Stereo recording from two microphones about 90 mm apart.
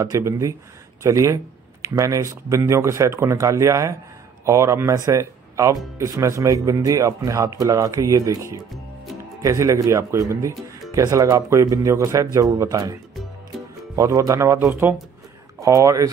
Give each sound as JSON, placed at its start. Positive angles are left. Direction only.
{"t": 0.0, "sound": "speech", "side_deg": -35}